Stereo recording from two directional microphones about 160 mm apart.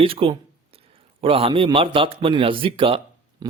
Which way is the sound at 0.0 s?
35° right (ahead or behind).